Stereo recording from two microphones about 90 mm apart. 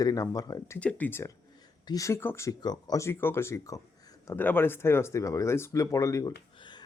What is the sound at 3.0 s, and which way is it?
Speech, 30° left (ahead or behind).